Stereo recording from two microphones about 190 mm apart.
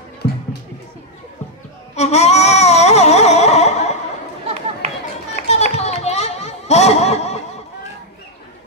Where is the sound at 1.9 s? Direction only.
35° left (ahead or behind).